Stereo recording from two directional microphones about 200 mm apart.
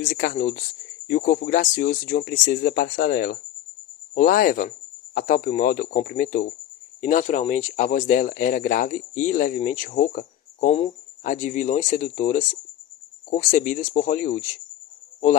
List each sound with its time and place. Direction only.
0.0 s speech: 45° left (ahead or behind)